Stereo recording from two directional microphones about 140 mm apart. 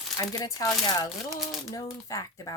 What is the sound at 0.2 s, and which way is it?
Speech, 25° left (ahead or behind).